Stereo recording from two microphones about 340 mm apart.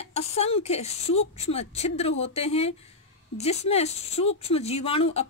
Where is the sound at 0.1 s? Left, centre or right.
Centre.